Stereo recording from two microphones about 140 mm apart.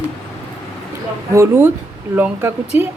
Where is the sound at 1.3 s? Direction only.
15° right (ahead or behind).